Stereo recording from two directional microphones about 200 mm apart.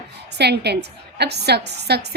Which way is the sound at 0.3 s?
55° right (ahead or behind).